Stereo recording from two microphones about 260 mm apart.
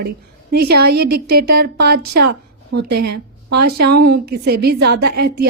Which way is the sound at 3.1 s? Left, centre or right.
Right.